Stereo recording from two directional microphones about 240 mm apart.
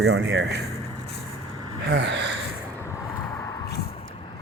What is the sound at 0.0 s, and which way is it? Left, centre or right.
Speech, right.